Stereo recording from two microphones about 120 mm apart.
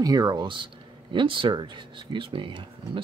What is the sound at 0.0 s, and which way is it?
Speech, 30° right (ahead or behind).